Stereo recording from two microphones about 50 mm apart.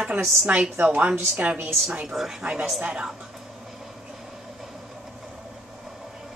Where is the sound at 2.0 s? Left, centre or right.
Centre; by 3.0 s right.